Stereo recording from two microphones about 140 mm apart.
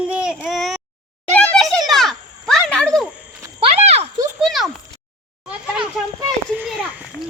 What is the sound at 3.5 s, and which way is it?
Horse, 50° right (ahead or behind).